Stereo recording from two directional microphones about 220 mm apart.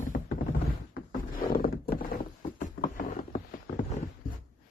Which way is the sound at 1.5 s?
40° left (ahead or behind).